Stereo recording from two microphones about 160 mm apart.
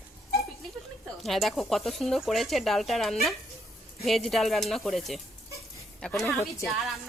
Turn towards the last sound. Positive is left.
turn(degrees=0)  # may be behind; listen again after turning